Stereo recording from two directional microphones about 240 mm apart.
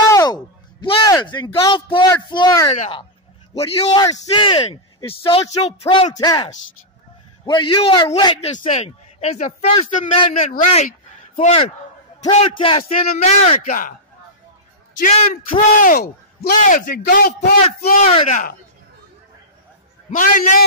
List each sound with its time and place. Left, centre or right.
0.1 s a man's voice: centre; by 13.9 s left
15.0 s a man's voice: left
20.1 s a man's voice: left